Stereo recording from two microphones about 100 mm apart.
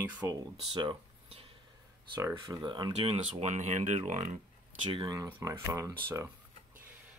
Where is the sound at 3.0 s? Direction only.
90° right.